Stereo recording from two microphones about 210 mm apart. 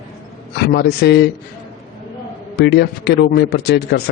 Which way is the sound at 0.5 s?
50° left (ahead or behind).